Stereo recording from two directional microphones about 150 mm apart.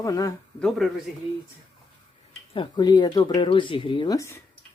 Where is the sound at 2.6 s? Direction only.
30° left (ahead or behind).